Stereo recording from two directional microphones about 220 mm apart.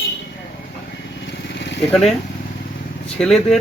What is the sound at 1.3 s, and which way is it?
Vehicle, 55° left (ahead or behind).